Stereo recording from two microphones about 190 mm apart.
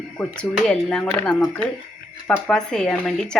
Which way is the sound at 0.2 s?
Centre (ahead or behind).